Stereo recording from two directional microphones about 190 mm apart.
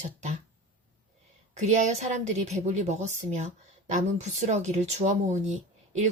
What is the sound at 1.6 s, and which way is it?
A woman's voice, 35° right (ahead or behind).